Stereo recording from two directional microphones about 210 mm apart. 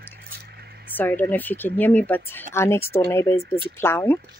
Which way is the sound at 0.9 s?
10° left (ahead or behind).